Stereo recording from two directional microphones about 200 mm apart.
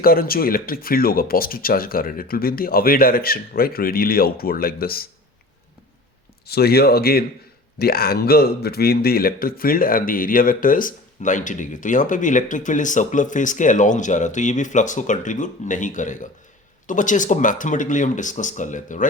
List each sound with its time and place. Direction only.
0.0 s speech: 45° left (ahead or behind)
6.5 s a man's voice: 50° left (ahead or behind)